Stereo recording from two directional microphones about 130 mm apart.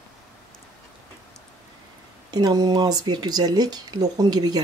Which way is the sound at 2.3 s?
35° right (ahead or behind).